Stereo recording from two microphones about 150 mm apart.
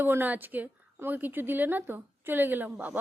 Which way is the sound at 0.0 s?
15° right (ahead or behind).